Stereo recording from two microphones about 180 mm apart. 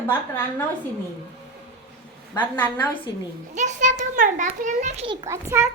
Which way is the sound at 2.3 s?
10° left (ahead or behind).